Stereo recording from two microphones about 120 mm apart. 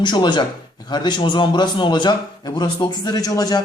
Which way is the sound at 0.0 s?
40° left (ahead or behind).